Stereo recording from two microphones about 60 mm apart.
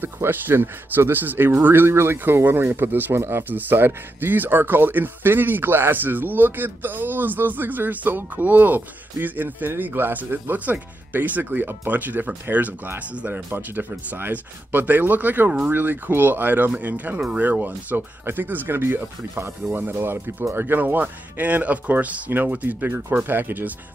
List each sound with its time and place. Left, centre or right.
0.0 s speech: right